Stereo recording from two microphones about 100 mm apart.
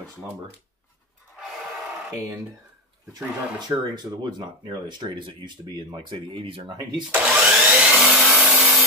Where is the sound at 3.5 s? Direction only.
45° right (ahead or behind).